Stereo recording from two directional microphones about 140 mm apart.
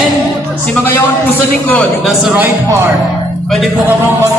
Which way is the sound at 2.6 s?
20° right (ahead or behind).